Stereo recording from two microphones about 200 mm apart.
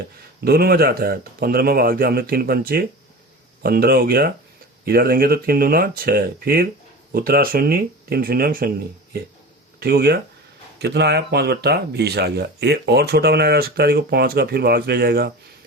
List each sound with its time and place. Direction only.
0.4 s speech: 50° right (ahead or behind)
9.8 s speech: 50° right (ahead or behind)